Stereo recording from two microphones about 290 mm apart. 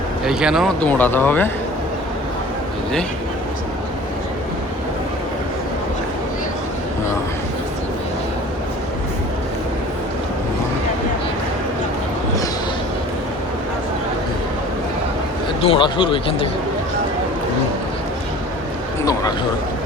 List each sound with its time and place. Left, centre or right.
0.3 s speech: centre
15.6 s speech: centre